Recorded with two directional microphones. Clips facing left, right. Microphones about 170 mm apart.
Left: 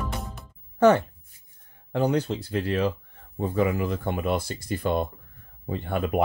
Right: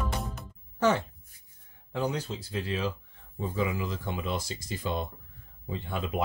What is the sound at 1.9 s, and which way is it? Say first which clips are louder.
Speech: left 7 dB; 60° left (ahead or behind).